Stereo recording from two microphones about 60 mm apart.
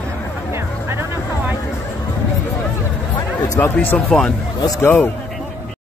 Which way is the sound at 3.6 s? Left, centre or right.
Left.